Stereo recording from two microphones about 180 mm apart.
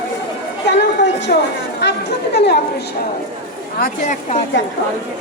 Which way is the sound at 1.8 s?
70° left (ahead or behind).